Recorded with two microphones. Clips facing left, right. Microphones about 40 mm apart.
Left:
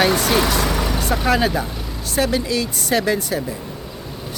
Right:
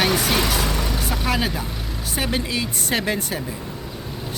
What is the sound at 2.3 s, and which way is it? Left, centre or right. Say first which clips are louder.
Speech: left 3 dB; right.